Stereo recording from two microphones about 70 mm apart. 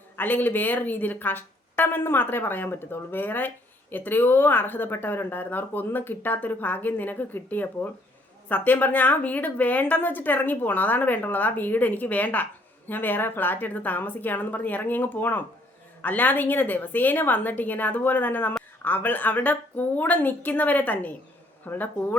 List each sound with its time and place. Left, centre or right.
0.2 s speech: left